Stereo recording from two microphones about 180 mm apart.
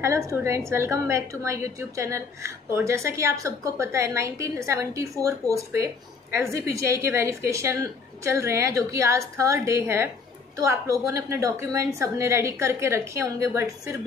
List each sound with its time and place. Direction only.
0.0 s a woman's voice: 15° right (ahead or behind)